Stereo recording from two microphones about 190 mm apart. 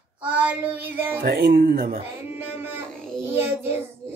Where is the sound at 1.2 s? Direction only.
55° right (ahead or behind).